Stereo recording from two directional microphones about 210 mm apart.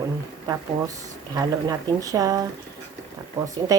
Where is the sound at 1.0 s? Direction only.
15° right (ahead or behind).